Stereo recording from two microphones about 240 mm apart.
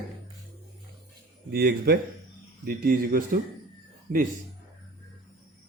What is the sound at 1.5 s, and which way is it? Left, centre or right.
A man's voice, right.